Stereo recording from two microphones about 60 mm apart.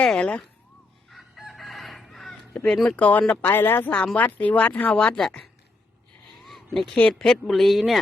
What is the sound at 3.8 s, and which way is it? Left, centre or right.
Speech, centre.